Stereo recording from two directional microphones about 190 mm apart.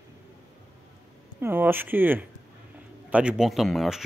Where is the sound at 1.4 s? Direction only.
10° right (ahead or behind).